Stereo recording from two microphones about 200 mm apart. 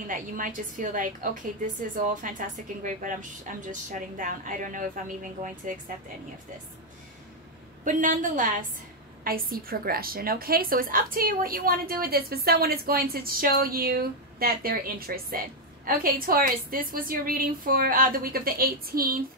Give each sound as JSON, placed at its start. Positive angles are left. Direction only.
{"t": 0.0, "sound": "a woman's voice", "side_deg": -40}
{"t": 7.8, "sound": "a woman's voice", "side_deg": -40}